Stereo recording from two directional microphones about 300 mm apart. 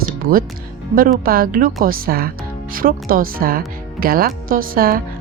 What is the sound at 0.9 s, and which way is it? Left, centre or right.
Speech, right.